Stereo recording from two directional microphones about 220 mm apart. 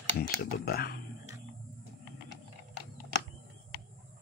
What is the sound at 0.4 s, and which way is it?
Speech, 45° left (ahead or behind).